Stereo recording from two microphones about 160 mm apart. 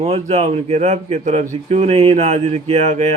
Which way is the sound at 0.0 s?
40° right (ahead or behind).